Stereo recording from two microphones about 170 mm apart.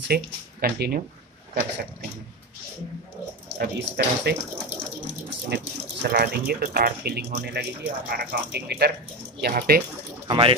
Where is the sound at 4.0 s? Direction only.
70° right (ahead or behind).